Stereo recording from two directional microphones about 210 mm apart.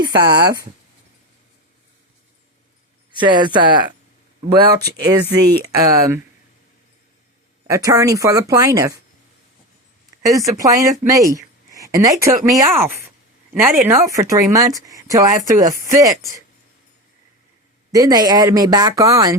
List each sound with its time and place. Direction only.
0.0 s speech: 15° right (ahead or behind)
3.2 s speech: 20° right (ahead or behind)
5.3 s speech: 15° right (ahead or behind)
7.7 s speech: 15° right (ahead or behind)
10.2 s speech: 15° right (ahead or behind)
17.9 s speech: 20° right (ahead or behind)